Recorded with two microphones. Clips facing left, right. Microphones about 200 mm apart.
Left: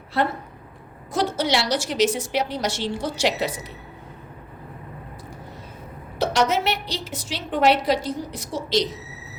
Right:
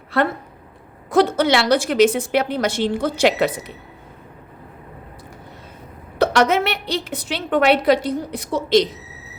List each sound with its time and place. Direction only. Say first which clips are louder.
1.1 s a woman's voice: right 7 dB; 60° right (ahead or behind)
6.1 s a woman's voice: right 5 dB; 60° right (ahead or behind)